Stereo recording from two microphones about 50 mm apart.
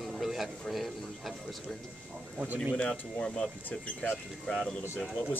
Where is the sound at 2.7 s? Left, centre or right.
Centre.